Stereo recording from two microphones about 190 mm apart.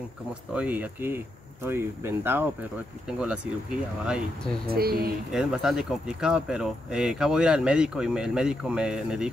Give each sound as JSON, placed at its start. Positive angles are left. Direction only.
{"t": 0.6, "sound": "speech", "side_deg": -10}
{"t": 4.6, "sound": "speech", "side_deg": -55}
{"t": 5.3, "sound": "speech", "side_deg": -5}